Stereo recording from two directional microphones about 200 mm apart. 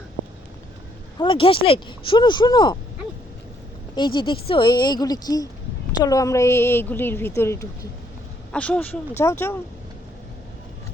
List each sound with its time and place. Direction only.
1.2 s speech: 25° left (ahead or behind)
3.9 s a woman's voice: 25° left (ahead or behind)